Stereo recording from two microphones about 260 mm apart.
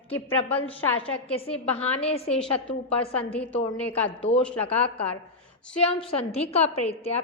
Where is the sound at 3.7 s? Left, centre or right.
Centre.